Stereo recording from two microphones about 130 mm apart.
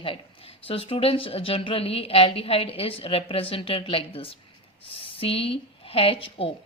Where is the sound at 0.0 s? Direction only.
45° left (ahead or behind).